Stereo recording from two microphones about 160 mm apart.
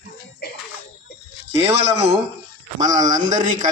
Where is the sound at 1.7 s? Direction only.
40° right (ahead or behind).